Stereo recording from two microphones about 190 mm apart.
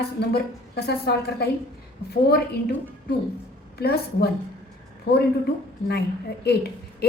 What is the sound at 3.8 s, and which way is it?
Speech, 55° left (ahead or behind).